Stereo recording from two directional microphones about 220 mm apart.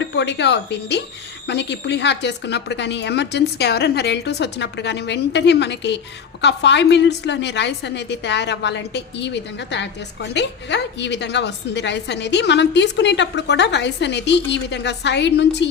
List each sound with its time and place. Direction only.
0.0 s a woman's voice: 55° left (ahead or behind)